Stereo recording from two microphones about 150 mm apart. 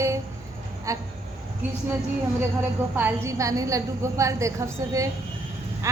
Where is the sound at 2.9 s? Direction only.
15° right (ahead or behind).